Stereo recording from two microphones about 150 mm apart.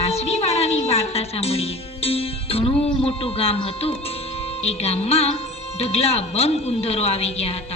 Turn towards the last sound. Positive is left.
turn(degrees=45)  # may be behind; listen again after turning